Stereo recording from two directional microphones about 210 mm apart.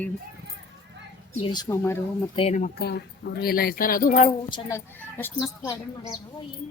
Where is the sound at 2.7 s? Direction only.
50° left (ahead or behind).